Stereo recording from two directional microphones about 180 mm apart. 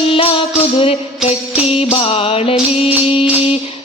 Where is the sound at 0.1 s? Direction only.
30° left (ahead or behind).